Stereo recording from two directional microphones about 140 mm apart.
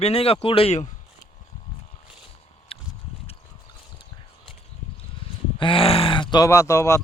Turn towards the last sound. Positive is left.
turn(degrees=20)  # may be behind; listen again after turning